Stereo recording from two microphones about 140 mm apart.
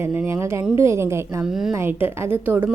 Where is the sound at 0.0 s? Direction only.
15° right (ahead or behind).